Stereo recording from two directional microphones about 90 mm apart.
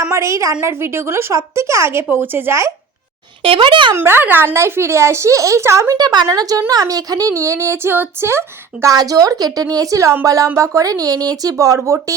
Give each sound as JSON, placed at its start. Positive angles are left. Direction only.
{"t": 0.1, "sound": "a woman's voice", "side_deg": -35}
{"t": 3.4, "sound": "speech", "side_deg": -80}
{"t": 3.9, "sound": "speech", "side_deg": -25}
{"t": 6.0, "sound": "speech", "side_deg": -50}